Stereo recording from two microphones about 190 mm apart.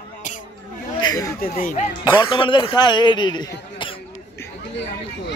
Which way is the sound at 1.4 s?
45° left (ahead or behind).